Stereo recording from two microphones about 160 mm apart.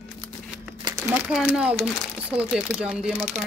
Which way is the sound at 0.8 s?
25° right (ahead or behind).